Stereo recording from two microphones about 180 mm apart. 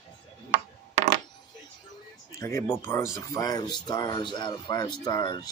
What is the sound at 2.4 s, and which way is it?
Speech, 15° left (ahead or behind).